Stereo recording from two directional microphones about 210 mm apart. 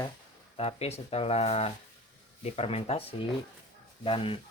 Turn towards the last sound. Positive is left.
turn(degrees=25)  # may be behind; listen again after turning